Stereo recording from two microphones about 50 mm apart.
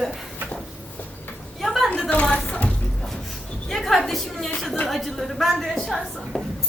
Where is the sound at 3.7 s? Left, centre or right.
Centre.